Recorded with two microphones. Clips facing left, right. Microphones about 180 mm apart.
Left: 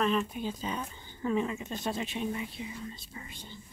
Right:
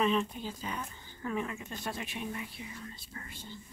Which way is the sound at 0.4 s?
20° left (ahead or behind).